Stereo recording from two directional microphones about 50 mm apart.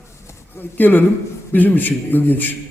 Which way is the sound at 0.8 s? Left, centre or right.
Left.